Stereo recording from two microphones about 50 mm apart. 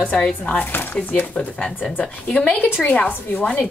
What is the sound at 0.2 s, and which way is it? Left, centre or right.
Speech, left.